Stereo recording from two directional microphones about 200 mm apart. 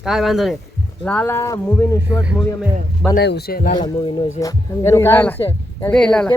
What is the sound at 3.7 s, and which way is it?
A man's voice, 20° left (ahead or behind).